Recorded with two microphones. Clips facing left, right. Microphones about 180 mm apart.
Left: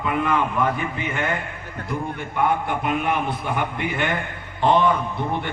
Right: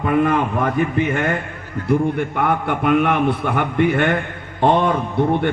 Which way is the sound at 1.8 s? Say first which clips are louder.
Right 11 dB; 65° right (ahead or behind).